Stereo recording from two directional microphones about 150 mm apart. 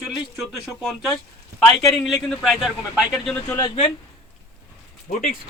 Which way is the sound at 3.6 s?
35° left (ahead or behind).